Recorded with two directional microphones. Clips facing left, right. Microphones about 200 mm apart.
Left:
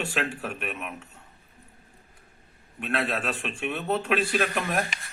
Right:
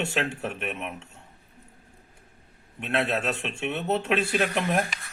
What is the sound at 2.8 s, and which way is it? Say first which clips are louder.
A man's voice: right 2 dB; 25° right (ahead or behind).